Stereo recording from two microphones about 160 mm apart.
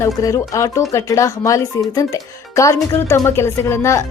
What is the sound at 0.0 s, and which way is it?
Speech, 20° left (ahead or behind).